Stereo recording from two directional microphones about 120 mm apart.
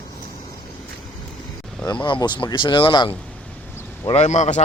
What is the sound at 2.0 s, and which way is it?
Speech, 40° left (ahead or behind).